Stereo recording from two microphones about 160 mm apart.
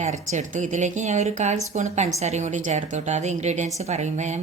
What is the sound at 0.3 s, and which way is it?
Speech, 50° right (ahead or behind).